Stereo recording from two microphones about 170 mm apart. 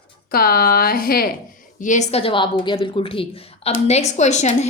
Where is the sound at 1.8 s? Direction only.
45° left (ahead or behind).